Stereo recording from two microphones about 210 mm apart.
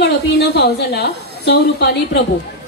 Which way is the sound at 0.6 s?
50° left (ahead or behind).